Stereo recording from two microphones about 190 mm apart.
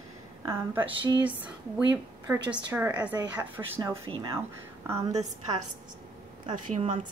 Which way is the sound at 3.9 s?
30° right (ahead or behind).